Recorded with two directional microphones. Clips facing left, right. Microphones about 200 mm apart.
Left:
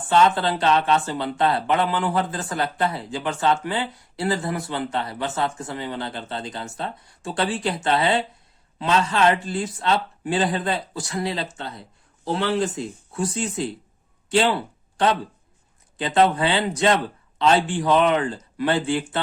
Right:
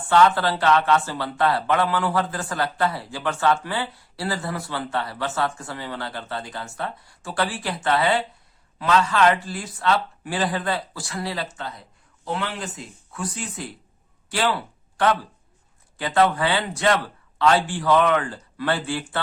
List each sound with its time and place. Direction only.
0.1 s speech: 20° left (ahead or behind)